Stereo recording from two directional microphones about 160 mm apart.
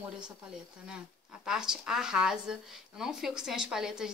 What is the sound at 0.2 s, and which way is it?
Speech, 5° right (ahead or behind).